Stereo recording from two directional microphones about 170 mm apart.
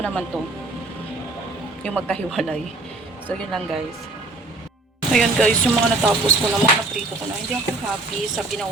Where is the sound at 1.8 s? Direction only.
5° left (ahead or behind).